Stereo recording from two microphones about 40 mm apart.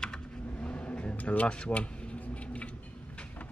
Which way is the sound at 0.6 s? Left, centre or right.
Left.